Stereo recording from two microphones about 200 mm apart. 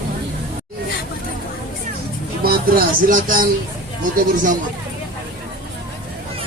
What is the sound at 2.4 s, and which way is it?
Speech, 45° right (ahead or behind).